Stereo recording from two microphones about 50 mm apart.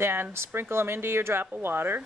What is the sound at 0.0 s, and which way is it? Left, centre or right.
Speech, right.